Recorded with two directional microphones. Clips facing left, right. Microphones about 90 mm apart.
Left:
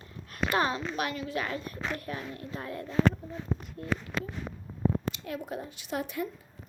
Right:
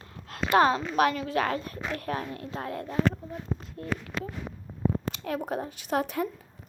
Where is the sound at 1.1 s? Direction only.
90° right.